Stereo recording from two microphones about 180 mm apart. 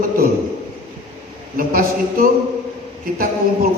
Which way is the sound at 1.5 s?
50° right (ahead or behind).